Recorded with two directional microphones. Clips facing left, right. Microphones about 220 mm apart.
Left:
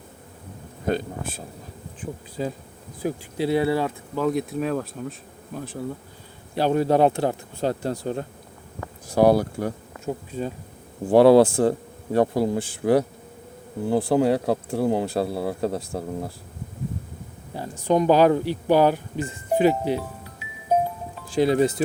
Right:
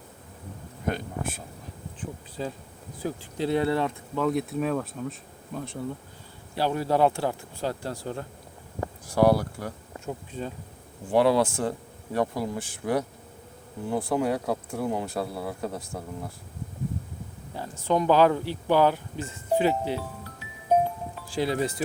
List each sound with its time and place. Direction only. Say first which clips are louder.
2.0 s bee: left 5 dB; 10° left (ahead or behind)
3.0 s speech: left 4 dB; 10° left (ahead or behind)
6.6 s speech: left 5 dB; 20° left (ahead or behind)
10.3 s bee: left 5 dB; 10° left (ahead or behind)
11.1 s speech: left 8 dB; 35° left (ahead or behind)
17.5 s speech: left 4 dB; 15° left (ahead or behind)